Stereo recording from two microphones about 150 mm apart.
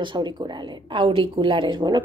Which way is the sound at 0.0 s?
30° right (ahead or behind).